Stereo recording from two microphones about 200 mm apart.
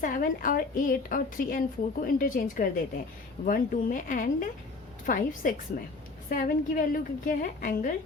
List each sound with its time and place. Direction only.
0.0 s a woman's voice: 45° left (ahead or behind)